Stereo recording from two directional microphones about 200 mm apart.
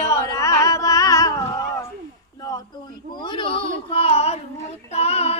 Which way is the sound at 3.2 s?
25° left (ahead or behind).